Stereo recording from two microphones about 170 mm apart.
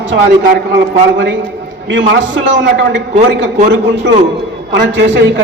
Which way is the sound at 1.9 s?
90° right.